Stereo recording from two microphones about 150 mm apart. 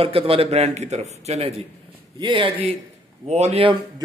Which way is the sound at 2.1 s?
30° right (ahead or behind).